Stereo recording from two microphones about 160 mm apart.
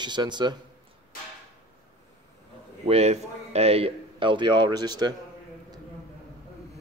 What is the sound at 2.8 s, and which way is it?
A man's voice, 40° right (ahead or behind).